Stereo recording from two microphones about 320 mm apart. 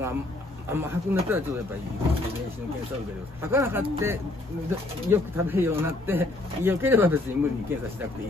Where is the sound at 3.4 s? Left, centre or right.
Centre.